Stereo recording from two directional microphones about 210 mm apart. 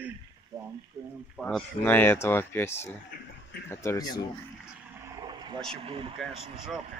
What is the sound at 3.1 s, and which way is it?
Speech, 45° left (ahead or behind).